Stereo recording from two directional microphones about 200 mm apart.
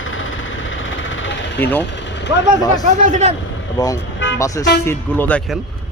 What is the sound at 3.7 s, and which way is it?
Speech, 15° left (ahead or behind).